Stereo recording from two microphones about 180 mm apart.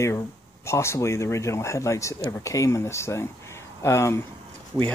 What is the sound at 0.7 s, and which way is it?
Speech, 15° left (ahead or behind).